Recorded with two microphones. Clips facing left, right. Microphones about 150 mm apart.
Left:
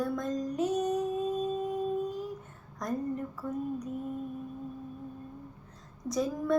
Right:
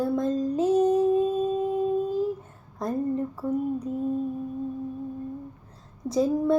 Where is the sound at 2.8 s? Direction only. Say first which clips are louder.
Right 6 dB; 30° right (ahead or behind).